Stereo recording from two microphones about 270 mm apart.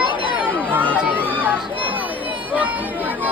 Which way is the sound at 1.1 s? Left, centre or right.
Centre.